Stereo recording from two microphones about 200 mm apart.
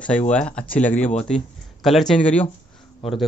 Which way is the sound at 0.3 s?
5° left (ahead or behind).